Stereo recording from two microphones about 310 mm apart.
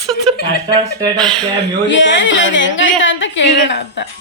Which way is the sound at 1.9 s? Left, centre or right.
Left.